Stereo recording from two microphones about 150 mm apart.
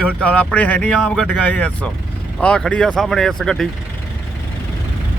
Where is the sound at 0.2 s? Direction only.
10° left (ahead or behind).